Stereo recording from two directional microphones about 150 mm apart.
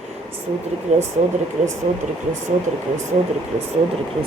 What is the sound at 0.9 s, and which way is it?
Speech, 50° right (ahead or behind).